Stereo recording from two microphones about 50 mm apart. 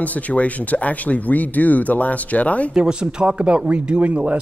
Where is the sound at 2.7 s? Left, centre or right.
Centre.